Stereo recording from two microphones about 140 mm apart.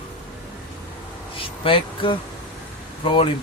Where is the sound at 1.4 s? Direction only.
40° left (ahead or behind).